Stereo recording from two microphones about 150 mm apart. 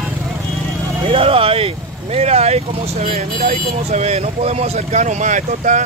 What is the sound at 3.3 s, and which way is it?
Speech, 65° right (ahead or behind).